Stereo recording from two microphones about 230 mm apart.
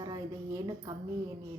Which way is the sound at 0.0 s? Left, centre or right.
Centre.